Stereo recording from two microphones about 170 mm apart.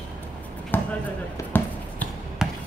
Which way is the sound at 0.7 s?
10° left (ahead or behind).